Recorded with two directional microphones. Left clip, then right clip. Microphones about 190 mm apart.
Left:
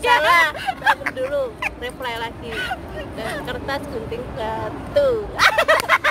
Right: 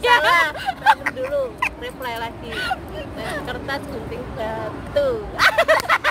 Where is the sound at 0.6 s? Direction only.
10° right (ahead or behind).